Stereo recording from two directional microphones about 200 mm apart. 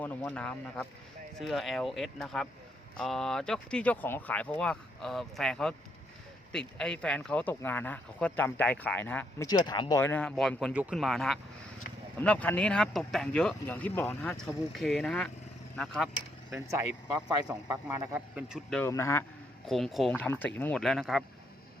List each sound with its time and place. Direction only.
0.0 s speech: 10° left (ahead or behind)
9.5 s speech: 20° left (ahead or behind)
10.0 s speech: 10° left (ahead or behind)
16.5 s speech: 15° right (ahead or behind)
18.8 s speech: 15° left (ahead or behind)
19.6 s speech: centre (ahead or behind)